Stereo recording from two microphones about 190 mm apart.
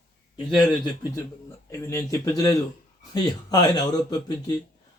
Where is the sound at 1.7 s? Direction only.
15° left (ahead or behind).